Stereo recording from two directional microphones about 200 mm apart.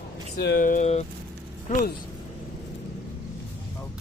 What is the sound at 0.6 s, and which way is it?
Speech, 40° left (ahead or behind).